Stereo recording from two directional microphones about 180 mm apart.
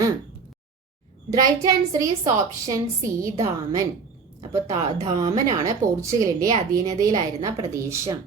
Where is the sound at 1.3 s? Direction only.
20° right (ahead or behind).